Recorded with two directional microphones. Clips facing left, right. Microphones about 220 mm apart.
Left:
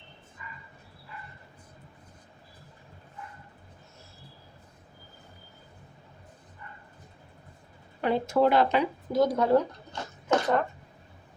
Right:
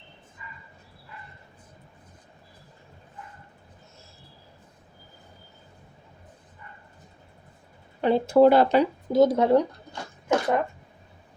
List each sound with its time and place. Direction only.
8.0 s speech: 30° right (ahead or behind)
9.2 s speech: 25° right (ahead or behind)
9.6 s a sound: 10° right (ahead or behind)